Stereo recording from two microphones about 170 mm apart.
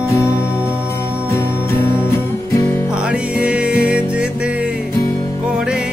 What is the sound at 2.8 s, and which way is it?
Music, 5° right (ahead or behind).